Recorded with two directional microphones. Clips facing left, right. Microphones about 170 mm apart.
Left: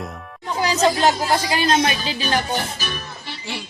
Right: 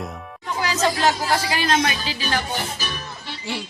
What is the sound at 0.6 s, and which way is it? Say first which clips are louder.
Speech: left 3 dB; 25° left (ahead or behind).